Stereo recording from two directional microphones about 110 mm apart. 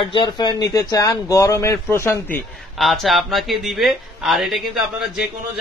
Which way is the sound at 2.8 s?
Centre (ahead or behind).